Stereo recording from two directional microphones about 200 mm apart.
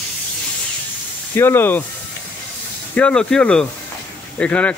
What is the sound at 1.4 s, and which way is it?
Speech, 10° left (ahead or behind).